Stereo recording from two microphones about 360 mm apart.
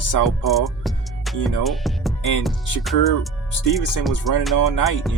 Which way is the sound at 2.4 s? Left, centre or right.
Centre.